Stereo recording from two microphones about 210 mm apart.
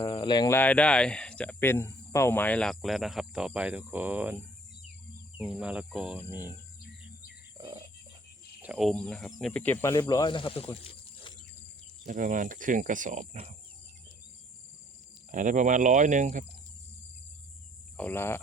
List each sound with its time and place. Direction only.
0.0 s speech: 20° left (ahead or behind); by 4.4 s 10° right (ahead or behind)
5.4 s speech: 5° right (ahead or behind)
7.6 s a sound: 15° right (ahead or behind)
8.6 s speech: 5° right (ahead or behind); by 10.8 s 25° left (ahead or behind)
12.0 s speech: 35° right (ahead or behind)
15.3 s speech: 35° right (ahead or behind)
17.9 s speech: 10° left (ahead or behind)